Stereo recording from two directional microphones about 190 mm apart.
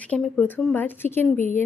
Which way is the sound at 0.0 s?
5° left (ahead or behind).